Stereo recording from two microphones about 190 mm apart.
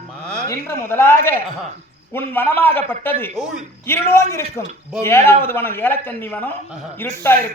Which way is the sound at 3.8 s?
15° left (ahead or behind).